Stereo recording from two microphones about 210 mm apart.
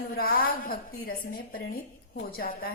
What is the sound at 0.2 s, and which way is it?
A woman's voice, 45° left (ahead or behind).